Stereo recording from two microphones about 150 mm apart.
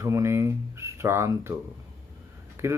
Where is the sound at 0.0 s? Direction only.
20° right (ahead or behind).